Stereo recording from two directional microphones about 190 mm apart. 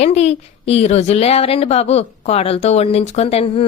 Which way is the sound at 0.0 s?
35° left (ahead or behind).